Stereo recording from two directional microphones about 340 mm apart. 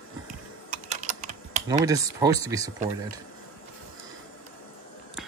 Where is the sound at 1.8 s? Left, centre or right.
Centre.